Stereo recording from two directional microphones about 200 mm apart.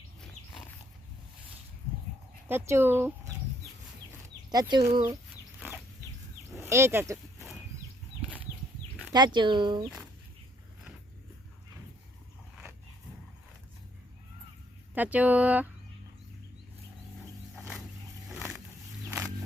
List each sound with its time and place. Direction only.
2.5 s speech: 10° right (ahead or behind)
4.5 s speech: 20° right (ahead or behind)
5.5 s a sound: centre (ahead or behind)
6.6 s speech: 15° right (ahead or behind)
9.1 s speech: 20° right (ahead or behind)
14.9 s speech: 10° right (ahead or behind)
17.6 s a sound: 15° right (ahead or behind)